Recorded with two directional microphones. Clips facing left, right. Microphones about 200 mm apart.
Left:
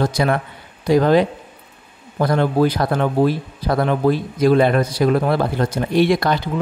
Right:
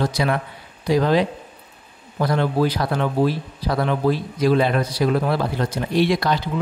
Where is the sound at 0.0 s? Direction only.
50° left (ahead or behind).